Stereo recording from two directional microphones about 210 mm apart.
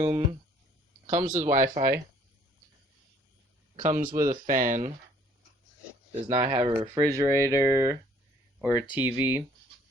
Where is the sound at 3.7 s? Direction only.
35° right (ahead or behind).